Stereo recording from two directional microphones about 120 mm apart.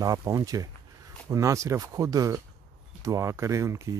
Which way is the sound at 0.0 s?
30° right (ahead or behind).